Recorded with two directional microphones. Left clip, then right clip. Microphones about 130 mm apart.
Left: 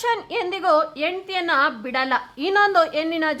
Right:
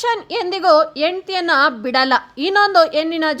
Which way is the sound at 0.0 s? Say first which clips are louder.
Right 3 dB; 30° right (ahead or behind).